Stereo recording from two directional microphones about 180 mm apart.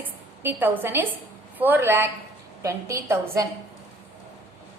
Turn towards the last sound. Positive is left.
turn(degrees=-15)  # may be behind; listen again after turning